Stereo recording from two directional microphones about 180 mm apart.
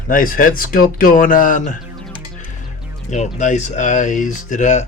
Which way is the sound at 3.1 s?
40° left (ahead or behind).